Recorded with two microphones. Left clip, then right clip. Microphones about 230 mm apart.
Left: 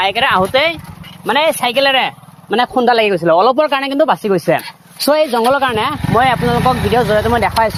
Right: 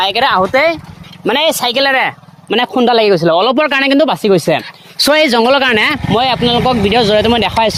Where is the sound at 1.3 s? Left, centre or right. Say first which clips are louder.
Right 1 dB; right.